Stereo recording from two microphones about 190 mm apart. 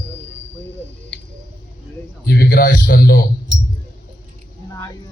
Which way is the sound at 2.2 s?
50° left (ahead or behind).